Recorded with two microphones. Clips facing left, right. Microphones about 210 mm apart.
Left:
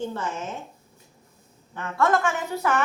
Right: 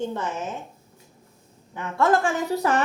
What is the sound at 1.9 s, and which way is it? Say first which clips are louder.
Speech: right 2 dB; 30° right (ahead or behind).